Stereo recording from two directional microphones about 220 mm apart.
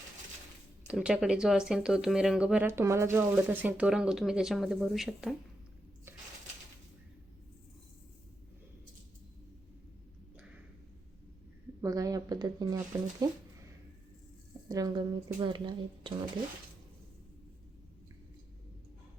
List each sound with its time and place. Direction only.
0.9 s speech: 5° right (ahead or behind)
6.1 s a sound: 10° right (ahead or behind)
11.8 s speech: 15° right (ahead or behind)
14.7 s speech: 15° right (ahead or behind)